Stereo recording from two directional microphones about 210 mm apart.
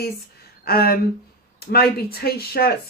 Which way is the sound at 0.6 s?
45° left (ahead or behind).